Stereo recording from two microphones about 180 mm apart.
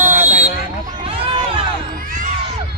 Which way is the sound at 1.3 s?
30° right (ahead or behind).